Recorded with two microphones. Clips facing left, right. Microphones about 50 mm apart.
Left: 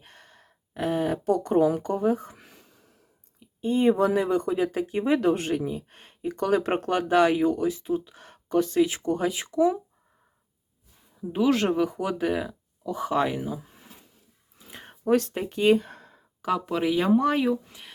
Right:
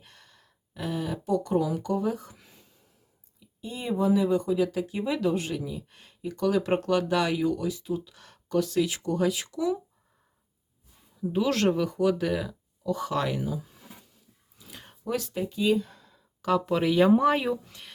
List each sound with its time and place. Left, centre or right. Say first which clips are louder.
0.0 s gasp: left 4 dB; left
1.2 s speech: left 3 dB; left
2.3 s a sound: left 4 dB; left
3.4 s speech: left 13 dB; left
11.2 s speech: left 2 dB; centre
14.7 s a sound: left 6 dB; left
15.1 s speech: left 6 dB; left
16.4 s speech: right 1 dB; centre
17.7 s speech: left 1 dB; centre